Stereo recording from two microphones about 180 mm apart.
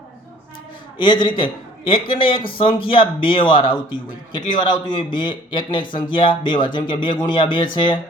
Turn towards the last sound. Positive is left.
turn(degrees=25)  # may be behind; listen again after turning